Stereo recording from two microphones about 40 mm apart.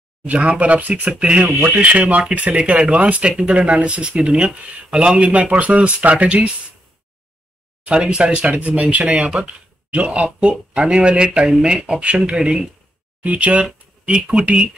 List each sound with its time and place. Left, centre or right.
0.2 s speech: right
1.2 s speech: right
1.6 s speech: right
7.9 s speech: right
13.2 s speech: right
14.0 s speech: right